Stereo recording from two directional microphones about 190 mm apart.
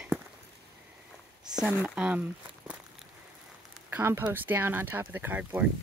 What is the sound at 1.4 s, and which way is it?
Speech, 5° right (ahead or behind).